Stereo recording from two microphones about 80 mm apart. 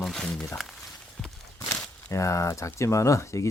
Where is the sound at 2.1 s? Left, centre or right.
Left.